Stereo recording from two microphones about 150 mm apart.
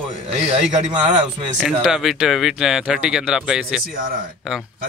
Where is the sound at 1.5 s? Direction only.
5° right (ahead or behind).